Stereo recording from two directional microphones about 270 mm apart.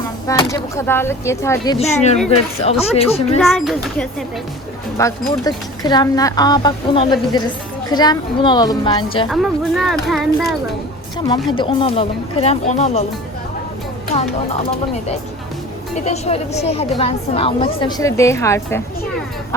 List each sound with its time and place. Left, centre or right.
0.3 s speech: centre
1.8 s speech: left
3.3 s speech: centre
4.9 s speech: centre
9.3 s speech: centre
11.5 s speech: centre
14.1 s speech: left